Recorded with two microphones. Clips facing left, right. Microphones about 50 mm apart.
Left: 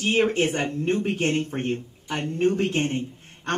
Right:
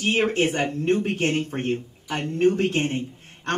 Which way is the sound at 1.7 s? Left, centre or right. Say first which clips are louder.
Right 1 dB; centre.